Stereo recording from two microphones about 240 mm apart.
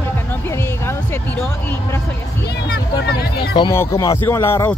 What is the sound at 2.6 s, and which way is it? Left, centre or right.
Vehicle, left.